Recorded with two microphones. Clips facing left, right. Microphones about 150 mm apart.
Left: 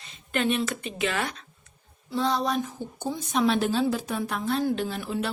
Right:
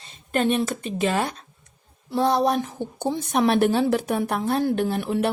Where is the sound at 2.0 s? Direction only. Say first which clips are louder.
Right 6 dB; 55° right (ahead or behind).